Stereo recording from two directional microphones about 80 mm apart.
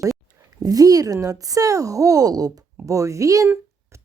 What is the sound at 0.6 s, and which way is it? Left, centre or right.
Speech, right.